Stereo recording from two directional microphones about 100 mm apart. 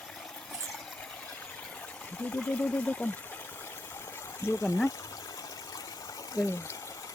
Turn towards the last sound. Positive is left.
turn(degrees=30)  # may be behind; listen again after turning